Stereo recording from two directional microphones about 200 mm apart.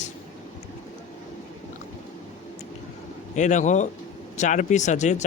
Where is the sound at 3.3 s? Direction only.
35° left (ahead or behind).